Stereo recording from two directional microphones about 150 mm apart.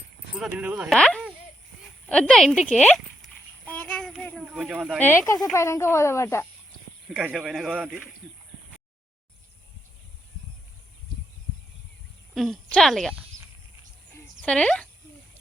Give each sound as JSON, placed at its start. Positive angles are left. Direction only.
{"t": 0.3, "sound": "speech", "side_deg": -10}
{"t": 0.9, "sound": "speech", "side_deg": 5}
{"t": 3.7, "sound": "child singing", "side_deg": 5}
{"t": 4.4, "sound": "speech", "side_deg": -5}
{"t": 4.9, "sound": "speech", "side_deg": 15}
{"t": 7.1, "sound": "speech", "side_deg": -5}
{"t": 12.3, "sound": "speech", "side_deg": 0}
{"t": 14.4, "sound": "speech", "side_deg": 5}